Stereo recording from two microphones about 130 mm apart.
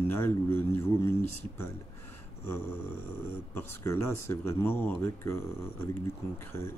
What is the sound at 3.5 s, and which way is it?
Speech, 20° left (ahead or behind).